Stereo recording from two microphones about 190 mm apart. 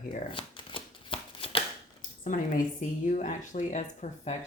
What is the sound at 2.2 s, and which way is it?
Speech, 45° left (ahead or behind).